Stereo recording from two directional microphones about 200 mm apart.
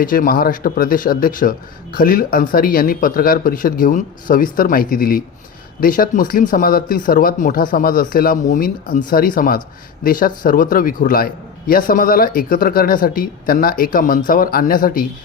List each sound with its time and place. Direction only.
0.0 s a man's voice: 45° left (ahead or behind)